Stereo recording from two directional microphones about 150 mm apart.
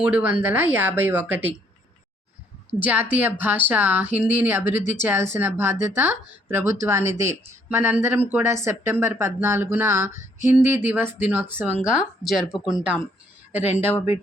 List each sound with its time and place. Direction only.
0.0 s speech: 10° right (ahead or behind)
2.7 s speech: 10° right (ahead or behind)